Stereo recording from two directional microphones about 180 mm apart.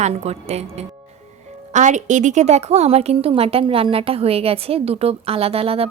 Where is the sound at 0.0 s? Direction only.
35° right (ahead or behind).